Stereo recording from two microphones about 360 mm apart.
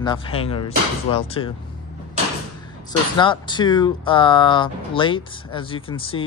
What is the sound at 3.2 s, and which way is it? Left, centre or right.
Speech, centre.